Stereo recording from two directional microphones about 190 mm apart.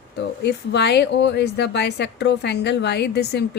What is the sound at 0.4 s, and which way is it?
A woman's voice, 60° left (ahead or behind).